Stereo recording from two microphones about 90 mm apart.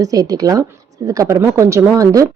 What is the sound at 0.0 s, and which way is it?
Speech, 40° right (ahead or behind).